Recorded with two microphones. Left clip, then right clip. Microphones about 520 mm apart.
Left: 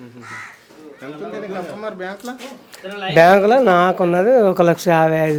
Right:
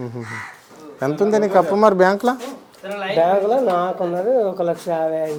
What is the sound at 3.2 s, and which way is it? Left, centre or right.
Speech, left.